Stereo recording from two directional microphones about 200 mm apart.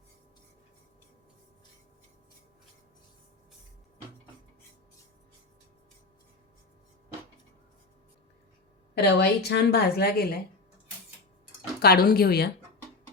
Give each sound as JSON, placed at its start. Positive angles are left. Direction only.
{"t": 9.0, "sound": "a woman's voice", "side_deg": 55}
{"t": 11.8, "sound": "a woman's voice", "side_deg": 50}